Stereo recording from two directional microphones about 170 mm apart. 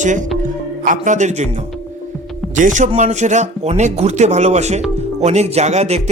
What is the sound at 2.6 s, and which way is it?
Speech, 45° right (ahead or behind).